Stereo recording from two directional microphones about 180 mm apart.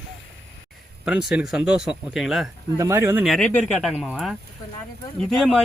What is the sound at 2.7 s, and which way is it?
Speech, 15° right (ahead or behind).